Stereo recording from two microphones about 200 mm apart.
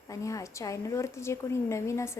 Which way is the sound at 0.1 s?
15° left (ahead or behind).